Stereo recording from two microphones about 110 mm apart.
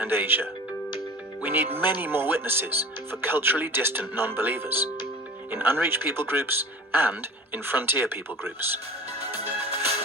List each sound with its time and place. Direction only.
0.0 s speech: 20° right (ahead or behind)
1.5 s speech: 20° right (ahead or behind)
9.4 s music: 70° right (ahead or behind)